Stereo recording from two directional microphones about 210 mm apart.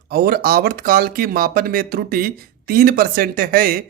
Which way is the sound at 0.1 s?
45° right (ahead or behind).